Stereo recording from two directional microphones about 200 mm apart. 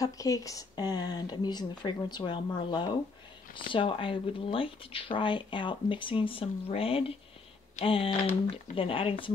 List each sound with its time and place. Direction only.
0.0 s speech: 15° left (ahead or behind)